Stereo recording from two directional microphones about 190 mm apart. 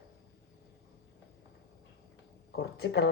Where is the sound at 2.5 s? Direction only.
60° left (ahead or behind).